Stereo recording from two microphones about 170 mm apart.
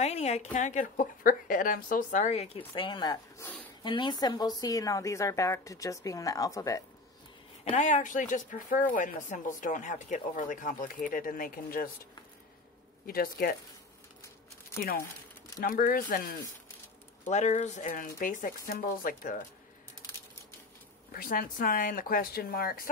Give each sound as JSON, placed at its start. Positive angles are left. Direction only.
{"t": 0.0, "sound": "a woman's voice", "side_deg": 40}
{"t": 7.6, "sound": "speech", "side_deg": 45}
{"t": 13.0, "sound": "speech", "side_deg": 60}
{"t": 15.6, "sound": "speech", "side_deg": 55}
{"t": 17.3, "sound": "speech", "side_deg": 45}
{"t": 21.1, "sound": "speech", "side_deg": 60}